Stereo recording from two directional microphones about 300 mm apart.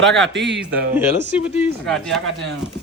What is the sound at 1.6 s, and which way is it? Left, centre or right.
Speech, centre.